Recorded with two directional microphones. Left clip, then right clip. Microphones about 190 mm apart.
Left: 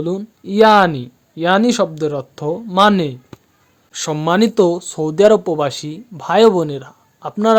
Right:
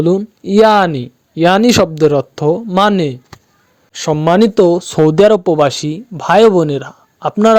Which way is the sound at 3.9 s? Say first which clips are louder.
Right 5 dB; 20° right (ahead or behind).